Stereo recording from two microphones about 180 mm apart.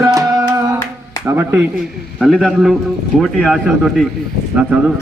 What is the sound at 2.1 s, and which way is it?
A man's voice, centre (ahead or behind).